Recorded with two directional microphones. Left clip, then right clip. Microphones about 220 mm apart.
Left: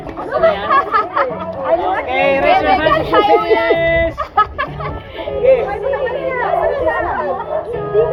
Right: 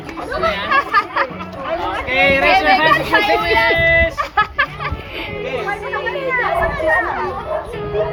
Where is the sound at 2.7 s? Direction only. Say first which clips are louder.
Even; 15° right (ahead or behind).